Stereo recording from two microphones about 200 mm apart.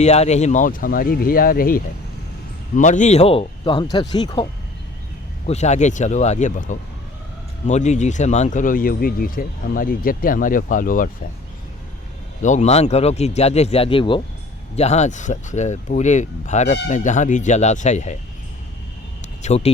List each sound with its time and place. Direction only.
0.0 s a man's voice: 35° left (ahead or behind)
5.5 s speech: 35° left (ahead or behind)
12.4 s speech: 35° left (ahead or behind)
19.4 s speech: 35° left (ahead or behind)